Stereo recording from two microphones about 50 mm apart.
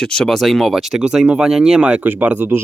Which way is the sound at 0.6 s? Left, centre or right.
Centre.